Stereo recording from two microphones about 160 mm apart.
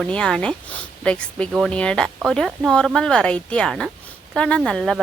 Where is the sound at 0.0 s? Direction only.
5° left (ahead or behind).